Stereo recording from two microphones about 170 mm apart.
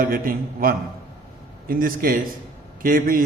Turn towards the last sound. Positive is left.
turn(degrees=-55)  # may be behind; listen again after turning